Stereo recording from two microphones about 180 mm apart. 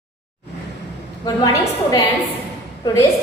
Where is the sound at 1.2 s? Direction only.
20° left (ahead or behind).